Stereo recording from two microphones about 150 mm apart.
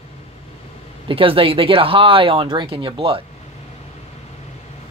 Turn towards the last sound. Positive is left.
turn(degrees=-35)  # may be behind; listen again after turning